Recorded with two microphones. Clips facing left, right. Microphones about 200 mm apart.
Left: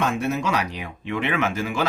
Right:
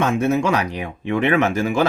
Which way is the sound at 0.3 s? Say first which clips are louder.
Right 5 dB; 50° right (ahead or behind).